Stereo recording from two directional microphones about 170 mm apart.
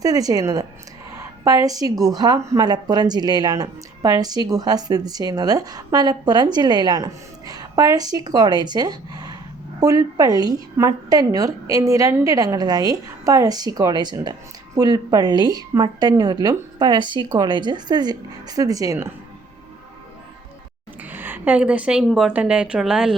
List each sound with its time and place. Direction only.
0.0 s speech: 20° right (ahead or behind)
21.0 s a woman's voice: 10° right (ahead or behind)